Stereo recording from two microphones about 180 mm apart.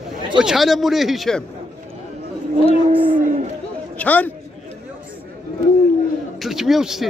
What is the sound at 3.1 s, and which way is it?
Speech, 45° right (ahead or behind).